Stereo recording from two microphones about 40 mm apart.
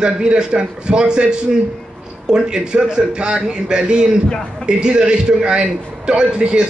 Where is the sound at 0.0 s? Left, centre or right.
Right.